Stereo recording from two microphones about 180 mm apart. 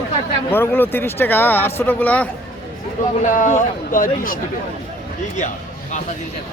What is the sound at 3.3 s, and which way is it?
Speech, 45° left (ahead or behind).